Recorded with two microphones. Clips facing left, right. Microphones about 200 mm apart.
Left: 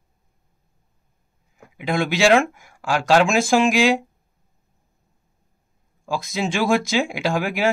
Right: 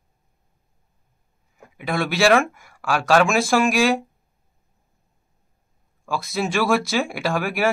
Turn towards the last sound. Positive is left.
turn(degrees=15)  # may be behind; listen again after turning